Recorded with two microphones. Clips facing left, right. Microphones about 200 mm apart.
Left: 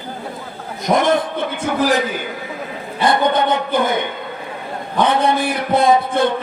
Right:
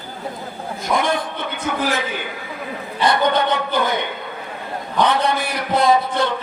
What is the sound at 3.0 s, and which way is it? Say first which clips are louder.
A man's voice: left 2 dB; 50° left (ahead or behind).